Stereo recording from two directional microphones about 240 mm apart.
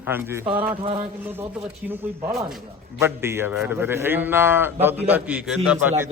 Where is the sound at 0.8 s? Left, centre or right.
Right.